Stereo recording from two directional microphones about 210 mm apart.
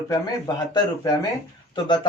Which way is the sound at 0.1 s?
20° left (ahead or behind).